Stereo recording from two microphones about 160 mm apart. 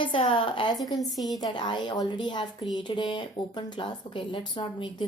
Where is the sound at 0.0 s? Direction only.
30° left (ahead or behind).